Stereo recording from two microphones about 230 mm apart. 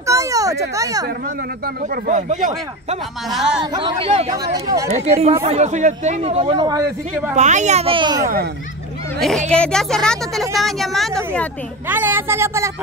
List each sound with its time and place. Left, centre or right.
0.0 s a sound: centre
2.0 s speech: right
3.3 s speech: centre
3.7 s speech: right
7.3 s speech: right
9.5 s a woman's voice: centre